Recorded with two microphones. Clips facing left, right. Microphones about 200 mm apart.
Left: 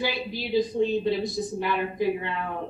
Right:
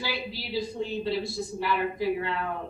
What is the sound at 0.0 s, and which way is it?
Speech, 20° left (ahead or behind).